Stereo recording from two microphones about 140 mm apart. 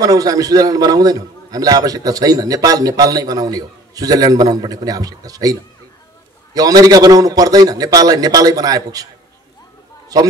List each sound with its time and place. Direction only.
0.0 s a man's voice: 25° right (ahead or behind)
10.1 s a man's voice: 25° right (ahead or behind)